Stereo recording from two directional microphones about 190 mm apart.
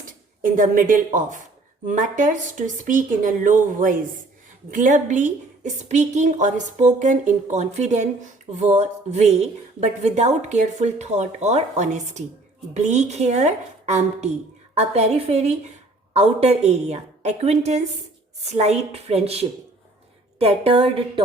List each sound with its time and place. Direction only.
0.0 s a woman's voice: 45° right (ahead or behind)